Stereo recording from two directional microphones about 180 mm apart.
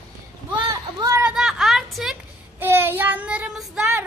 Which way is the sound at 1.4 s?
5° right (ahead or behind).